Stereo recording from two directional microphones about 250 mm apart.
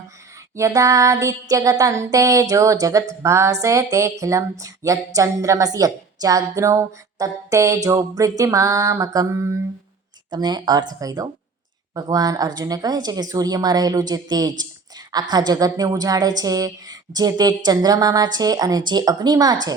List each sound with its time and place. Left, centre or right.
0.5 s music: centre
14.6 s a woman's voice: centre
16.4 s music: centre